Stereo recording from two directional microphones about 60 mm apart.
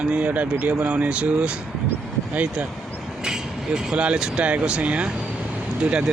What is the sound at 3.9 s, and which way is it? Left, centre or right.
Speech, centre.